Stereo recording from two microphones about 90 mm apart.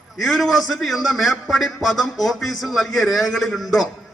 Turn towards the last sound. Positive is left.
turn(degrees=0)  # may be behind; listen again after turning